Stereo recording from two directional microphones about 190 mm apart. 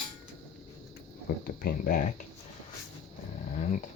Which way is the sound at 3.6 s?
40° left (ahead or behind).